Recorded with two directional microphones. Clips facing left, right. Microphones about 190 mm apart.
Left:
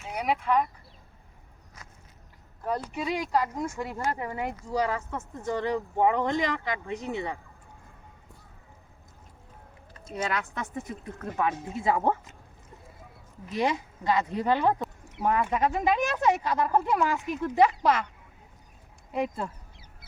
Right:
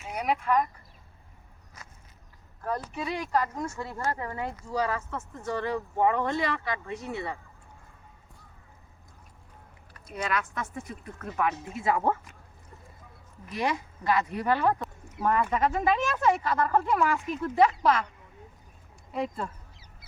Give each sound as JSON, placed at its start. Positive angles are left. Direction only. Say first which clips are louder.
{"t": 0.1, "sound": "speech", "louder": "even", "side_deg": 10}
{"t": 2.6, "sound": "speech", "louder": "left 2 dB", "side_deg": 15}
{"t": 9.9, "sound": "speech", "louder": "even", "side_deg": 25}
{"t": 13.6, "sound": "speech", "louder": "left 2 dB", "side_deg": 20}
{"t": 19.1, "sound": "speech", "louder": "left 2 dB", "side_deg": 15}